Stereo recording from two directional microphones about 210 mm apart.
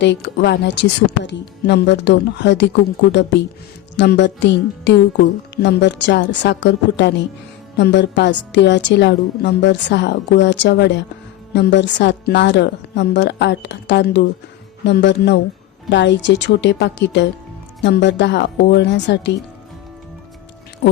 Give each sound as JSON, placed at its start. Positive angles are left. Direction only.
{"t": 0.0, "sound": "music", "side_deg": 55}
{"t": 20.8, "sound": "speech", "side_deg": 55}